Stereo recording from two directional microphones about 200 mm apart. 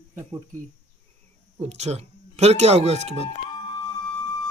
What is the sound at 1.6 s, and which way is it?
Speech, 35° right (ahead or behind).